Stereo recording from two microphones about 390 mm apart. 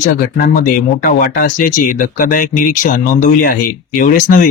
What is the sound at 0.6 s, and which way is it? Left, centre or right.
Speech, left.